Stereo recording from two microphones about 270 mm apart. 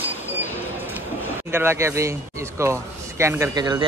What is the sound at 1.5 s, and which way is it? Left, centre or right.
A man's voice, centre.